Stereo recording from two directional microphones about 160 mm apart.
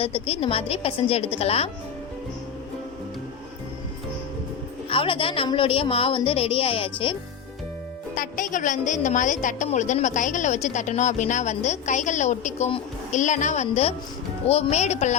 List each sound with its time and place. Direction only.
0.0 s a woman's voice: 35° left (ahead or behind)
4.9 s a woman's voice: 35° left (ahead or behind)
8.1 s a woman's voice: 55° left (ahead or behind)